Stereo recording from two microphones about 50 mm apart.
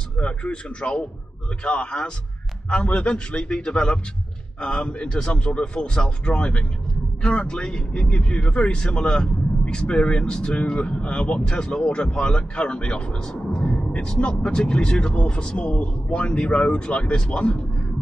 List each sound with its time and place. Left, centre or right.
0.2 s speech: left
13.3 s a sound: centre
14.4 s speech: centre